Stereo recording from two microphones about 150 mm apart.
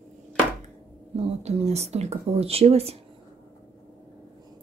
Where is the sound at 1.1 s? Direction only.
45° right (ahead or behind).